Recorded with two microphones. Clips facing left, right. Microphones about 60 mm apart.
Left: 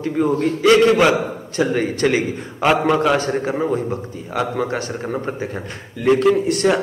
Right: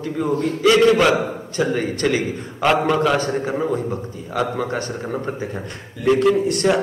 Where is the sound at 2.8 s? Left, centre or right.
Centre.